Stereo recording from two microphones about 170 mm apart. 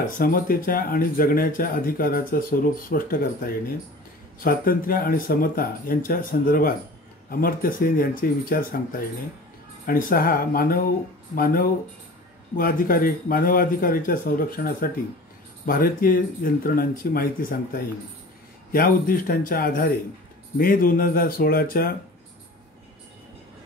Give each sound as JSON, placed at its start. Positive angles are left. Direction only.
{"t": 0.0, "sound": "speech", "side_deg": 55}
{"t": 9.8, "sound": "speech", "side_deg": 55}